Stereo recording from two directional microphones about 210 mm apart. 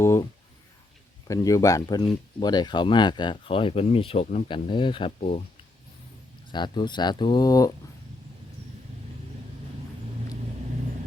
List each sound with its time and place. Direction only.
0.0 s speech: 15° left (ahead or behind)
1.3 s speech: 15° left (ahead or behind)
6.5 s speech: 20° left (ahead or behind)